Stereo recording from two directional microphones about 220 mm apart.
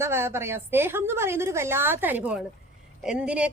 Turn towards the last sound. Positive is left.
turn(degrees=-5)  # may be behind; listen again after turning